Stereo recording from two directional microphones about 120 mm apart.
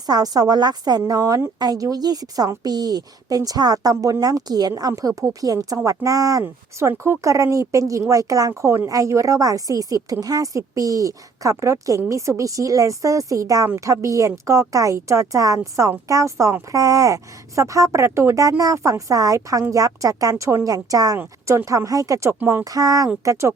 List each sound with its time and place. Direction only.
0.1 s a woman's voice: 30° right (ahead or behind)